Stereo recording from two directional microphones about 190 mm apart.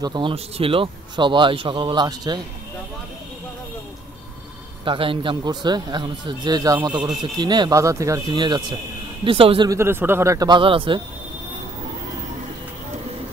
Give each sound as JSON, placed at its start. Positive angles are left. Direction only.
{"t": 0.0, "sound": "a man's voice", "side_deg": -25}
{"t": 4.8, "sound": "a man's voice", "side_deg": -30}
{"t": 9.7, "sound": "a man's voice", "side_deg": -15}